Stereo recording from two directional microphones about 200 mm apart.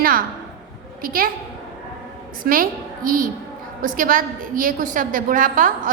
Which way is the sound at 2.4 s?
45° right (ahead or behind).